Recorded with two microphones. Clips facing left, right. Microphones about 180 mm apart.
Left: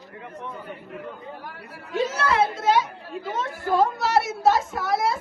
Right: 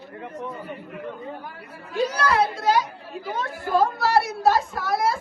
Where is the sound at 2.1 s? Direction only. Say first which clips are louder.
Right 1 dB; 25° left (ahead or behind).